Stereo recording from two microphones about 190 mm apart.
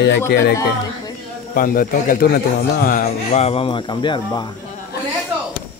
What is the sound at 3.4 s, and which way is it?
Speech, 30° left (ahead or behind).